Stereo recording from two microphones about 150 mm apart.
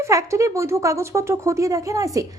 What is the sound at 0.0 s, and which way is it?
A woman's voice, 20° right (ahead or behind).